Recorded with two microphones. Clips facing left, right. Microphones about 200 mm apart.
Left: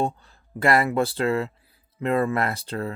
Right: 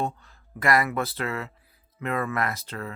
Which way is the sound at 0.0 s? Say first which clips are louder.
Left 4 dB; 30° left (ahead or behind).